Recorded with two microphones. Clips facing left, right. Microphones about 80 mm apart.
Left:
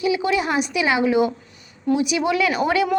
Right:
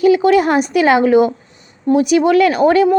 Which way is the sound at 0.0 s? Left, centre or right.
Right.